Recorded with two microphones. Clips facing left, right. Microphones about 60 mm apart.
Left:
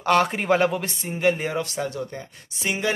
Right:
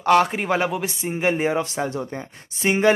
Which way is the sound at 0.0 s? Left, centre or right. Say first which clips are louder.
Right 3 dB; centre.